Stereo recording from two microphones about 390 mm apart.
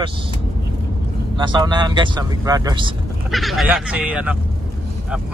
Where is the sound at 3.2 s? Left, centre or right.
Centre.